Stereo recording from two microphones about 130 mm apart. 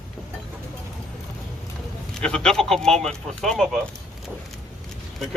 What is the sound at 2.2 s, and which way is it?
Speech, 5° left (ahead or behind).